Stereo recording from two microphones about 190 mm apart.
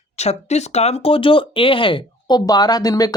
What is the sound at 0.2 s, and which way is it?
Speech, 35° left (ahead or behind).